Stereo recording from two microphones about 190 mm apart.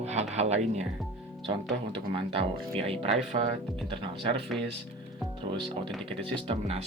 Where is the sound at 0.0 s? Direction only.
35° right (ahead or behind).